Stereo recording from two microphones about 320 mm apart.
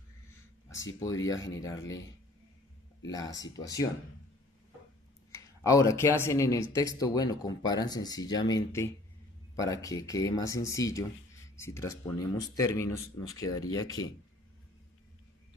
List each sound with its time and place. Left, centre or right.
0.7 s speech: left
0.9 s speech: centre
3.0 s speech: centre
5.3 s speech: centre